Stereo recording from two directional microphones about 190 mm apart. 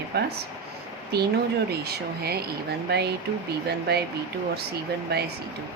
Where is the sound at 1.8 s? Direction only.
55° right (ahead or behind).